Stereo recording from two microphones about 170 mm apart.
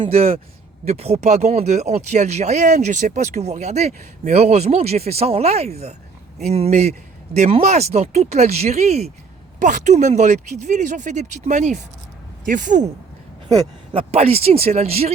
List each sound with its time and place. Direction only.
0.0 s speech: 35° right (ahead or behind)
13.5 s speech: 20° right (ahead or behind)
14.1 s speech: 35° right (ahead or behind)